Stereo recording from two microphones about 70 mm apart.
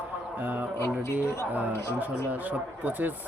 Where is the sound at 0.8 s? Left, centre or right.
Left.